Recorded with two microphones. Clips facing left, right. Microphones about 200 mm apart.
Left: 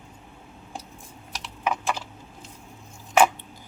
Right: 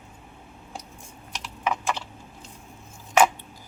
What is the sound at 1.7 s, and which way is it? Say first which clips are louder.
Typing: even; 10° left (ahead or behind).